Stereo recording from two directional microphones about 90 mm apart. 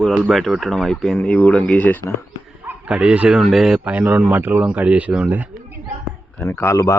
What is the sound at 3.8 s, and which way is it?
Speech, 15° right (ahead or behind).